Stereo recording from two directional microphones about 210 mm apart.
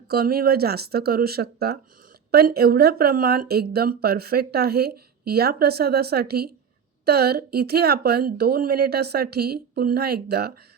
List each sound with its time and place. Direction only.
0.1 s speech: 45° right (ahead or behind)